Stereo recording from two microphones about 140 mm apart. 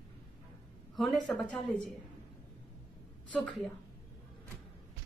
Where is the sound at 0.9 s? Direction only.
Centre (ahead or behind).